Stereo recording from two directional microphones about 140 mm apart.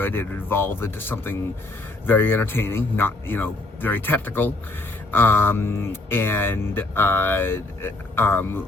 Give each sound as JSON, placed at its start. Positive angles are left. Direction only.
{"t": 0.0, "sound": "speech", "side_deg": 15}